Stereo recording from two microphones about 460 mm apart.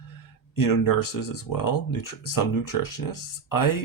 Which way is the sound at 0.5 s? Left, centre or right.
Left.